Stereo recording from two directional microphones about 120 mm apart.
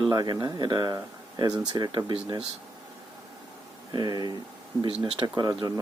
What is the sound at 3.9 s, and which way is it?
Speech, 35° right (ahead or behind).